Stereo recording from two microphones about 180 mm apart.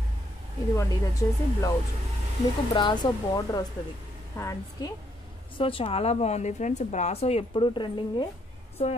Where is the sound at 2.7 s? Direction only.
25° left (ahead or behind).